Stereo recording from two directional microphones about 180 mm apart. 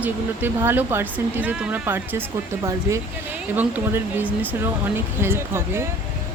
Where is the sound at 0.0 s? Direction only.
10° right (ahead or behind).